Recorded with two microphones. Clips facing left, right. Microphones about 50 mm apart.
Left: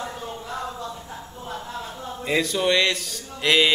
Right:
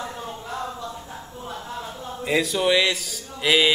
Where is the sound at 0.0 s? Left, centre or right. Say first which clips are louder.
Even; centre.